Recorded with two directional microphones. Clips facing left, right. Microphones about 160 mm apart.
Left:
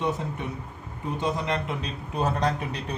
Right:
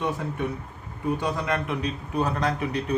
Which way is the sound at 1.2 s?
25° left (ahead or behind).